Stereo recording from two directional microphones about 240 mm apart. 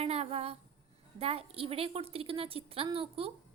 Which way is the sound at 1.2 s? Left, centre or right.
Right.